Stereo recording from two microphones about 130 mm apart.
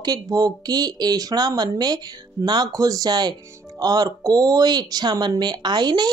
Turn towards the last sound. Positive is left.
turn(degrees=-35)  # may be behind; listen again after turning